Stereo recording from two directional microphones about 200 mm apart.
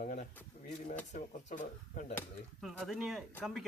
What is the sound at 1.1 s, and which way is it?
Speech, 35° left (ahead or behind).